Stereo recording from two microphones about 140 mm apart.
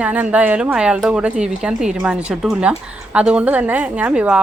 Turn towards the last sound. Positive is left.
turn(degrees=-10)  # may be behind; listen again after turning